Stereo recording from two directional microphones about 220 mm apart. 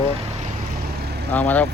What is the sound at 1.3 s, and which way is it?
Speech, 10° left (ahead or behind).